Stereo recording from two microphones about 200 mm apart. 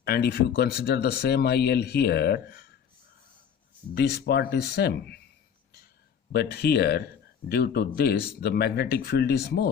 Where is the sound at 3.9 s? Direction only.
55° left (ahead or behind).